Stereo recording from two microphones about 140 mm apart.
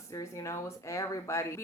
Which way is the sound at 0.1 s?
20° left (ahead or behind).